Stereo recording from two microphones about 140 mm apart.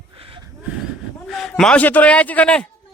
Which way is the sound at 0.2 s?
40° right (ahead or behind).